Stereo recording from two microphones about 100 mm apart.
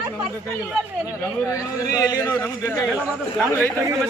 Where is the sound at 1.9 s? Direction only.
40° left (ahead or behind).